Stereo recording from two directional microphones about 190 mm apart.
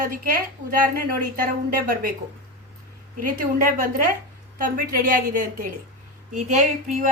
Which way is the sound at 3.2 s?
45° right (ahead or behind).